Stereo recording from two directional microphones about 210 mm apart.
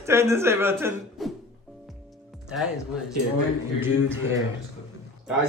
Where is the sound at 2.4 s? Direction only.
5° right (ahead or behind).